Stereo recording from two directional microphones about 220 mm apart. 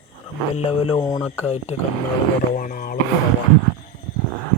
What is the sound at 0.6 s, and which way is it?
Speech, 25° left (ahead or behind).